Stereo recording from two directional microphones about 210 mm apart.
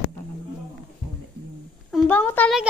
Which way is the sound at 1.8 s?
5° left (ahead or behind).